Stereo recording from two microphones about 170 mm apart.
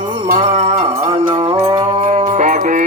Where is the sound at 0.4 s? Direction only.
35° right (ahead or behind).